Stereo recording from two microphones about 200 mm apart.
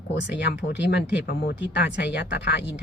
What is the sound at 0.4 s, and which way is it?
Speech, 60° left (ahead or behind).